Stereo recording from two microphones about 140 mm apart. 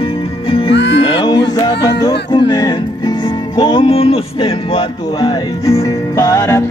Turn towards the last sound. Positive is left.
turn(degrees=25)  # may be behind; listen again after turning